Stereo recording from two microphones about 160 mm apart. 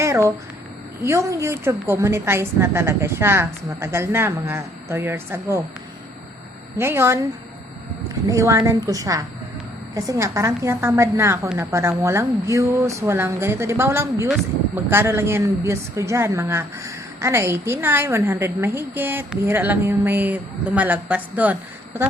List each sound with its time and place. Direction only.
0.0 s a woman's voice: 20° right (ahead or behind)
6.7 s a woman's voice: 15° right (ahead or behind)
8.3 s a woman's voice: 20° right (ahead or behind)